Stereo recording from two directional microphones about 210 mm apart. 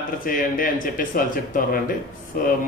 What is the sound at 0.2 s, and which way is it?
Speech, 40° left (ahead or behind).